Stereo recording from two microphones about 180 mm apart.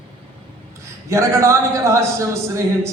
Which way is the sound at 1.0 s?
15° right (ahead or behind).